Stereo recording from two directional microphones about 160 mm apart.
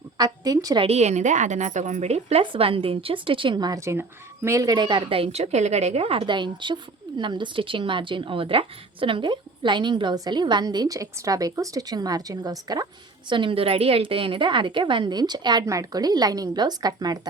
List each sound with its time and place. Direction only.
0.2 s a woman's voice: 25° right (ahead or behind)
0.9 s a woman's voice: 45° right (ahead or behind); by 17.2 s 25° right (ahead or behind)